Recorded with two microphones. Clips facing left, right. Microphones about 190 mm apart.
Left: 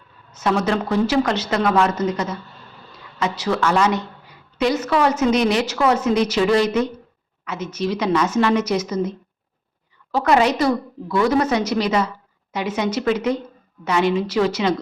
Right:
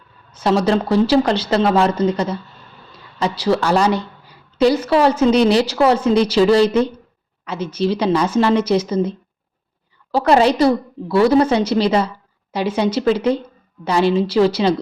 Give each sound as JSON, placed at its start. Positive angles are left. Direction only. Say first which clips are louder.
{"t": 0.3, "sound": "a woman's voice", "louder": "right 4 dB", "side_deg": -35}